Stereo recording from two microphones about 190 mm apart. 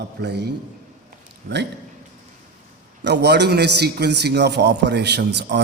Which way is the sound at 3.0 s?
60° right (ahead or behind).